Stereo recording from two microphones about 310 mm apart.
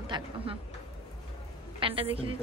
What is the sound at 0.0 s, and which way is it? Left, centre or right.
Speech, centre.